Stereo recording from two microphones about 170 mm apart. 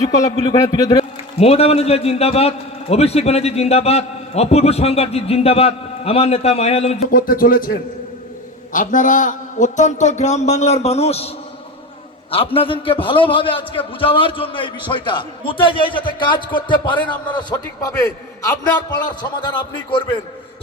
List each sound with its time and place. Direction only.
0.4 s a man's voice: 25° left (ahead or behind)
1.4 s a man's voice: 35° left (ahead or behind)
7.1 s speech: 55° left (ahead or behind)
8.7 s a man's voice: 50° left (ahead or behind)
12.3 s a man's voice: 35° left (ahead or behind)